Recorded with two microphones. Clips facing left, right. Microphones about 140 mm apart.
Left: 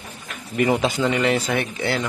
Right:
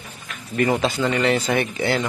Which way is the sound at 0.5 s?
15° left (ahead or behind).